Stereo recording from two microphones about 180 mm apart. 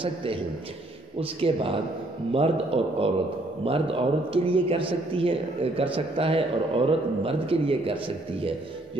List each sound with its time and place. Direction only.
0.0 s a man's voice: 30° right (ahead or behind)